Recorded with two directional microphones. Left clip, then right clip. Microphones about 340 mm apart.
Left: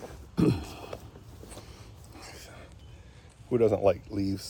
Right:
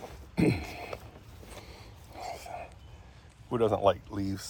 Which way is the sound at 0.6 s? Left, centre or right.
Centre.